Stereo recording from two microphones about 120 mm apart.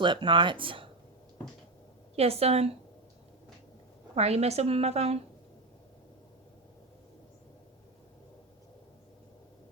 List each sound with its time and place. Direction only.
0.0 s speech: 40° right (ahead or behind)
2.1 s a woman's voice: 60° right (ahead or behind)
4.1 s a woman's voice: 60° right (ahead or behind)